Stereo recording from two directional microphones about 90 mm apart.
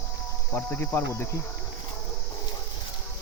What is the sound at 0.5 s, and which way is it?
Speech, 20° left (ahead or behind).